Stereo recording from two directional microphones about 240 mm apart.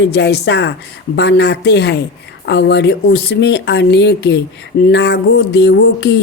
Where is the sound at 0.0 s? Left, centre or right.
Left.